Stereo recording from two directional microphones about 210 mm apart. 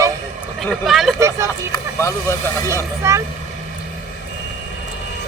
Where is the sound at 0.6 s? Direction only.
Centre (ahead or behind).